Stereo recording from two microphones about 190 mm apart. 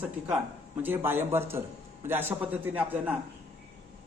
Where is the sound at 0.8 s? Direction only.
10° right (ahead or behind).